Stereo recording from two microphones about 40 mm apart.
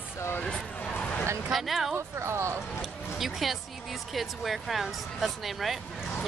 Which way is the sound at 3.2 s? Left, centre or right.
Centre.